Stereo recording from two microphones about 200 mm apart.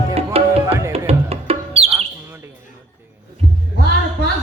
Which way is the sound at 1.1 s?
30° right (ahead or behind).